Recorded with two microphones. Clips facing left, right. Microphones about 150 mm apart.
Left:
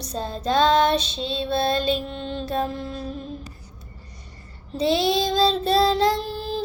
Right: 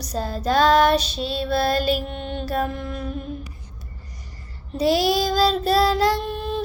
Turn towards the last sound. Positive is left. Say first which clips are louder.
# right 2 dB
turn(degrees=30)  # may be behind; listen again after turning